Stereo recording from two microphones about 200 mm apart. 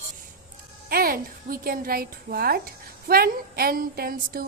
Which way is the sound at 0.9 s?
45° right (ahead or behind).